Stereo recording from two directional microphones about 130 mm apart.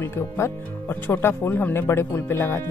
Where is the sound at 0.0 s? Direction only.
20° left (ahead or behind).